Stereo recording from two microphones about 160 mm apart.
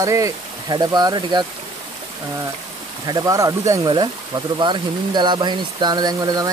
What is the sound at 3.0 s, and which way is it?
Speech, 25° right (ahead or behind).